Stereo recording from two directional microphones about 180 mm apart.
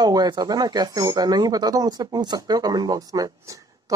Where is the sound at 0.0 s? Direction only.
20° right (ahead or behind).